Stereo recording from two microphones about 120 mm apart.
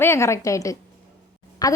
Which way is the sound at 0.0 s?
20° left (ahead or behind).